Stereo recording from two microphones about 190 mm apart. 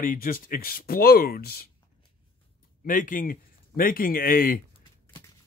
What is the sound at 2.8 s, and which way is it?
Speech, 45° left (ahead or behind).